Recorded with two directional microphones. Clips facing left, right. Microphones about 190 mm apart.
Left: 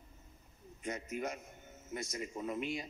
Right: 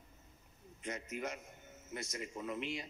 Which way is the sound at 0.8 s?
30° left (ahead or behind).